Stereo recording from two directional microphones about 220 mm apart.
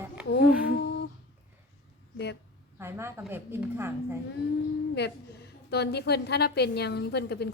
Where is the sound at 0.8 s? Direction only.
50° left (ahead or behind).